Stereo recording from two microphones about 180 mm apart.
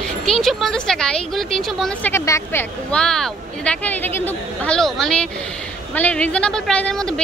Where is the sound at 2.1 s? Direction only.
15° left (ahead or behind).